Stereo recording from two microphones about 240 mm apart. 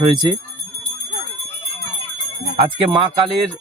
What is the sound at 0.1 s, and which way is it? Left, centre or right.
Speech, centre.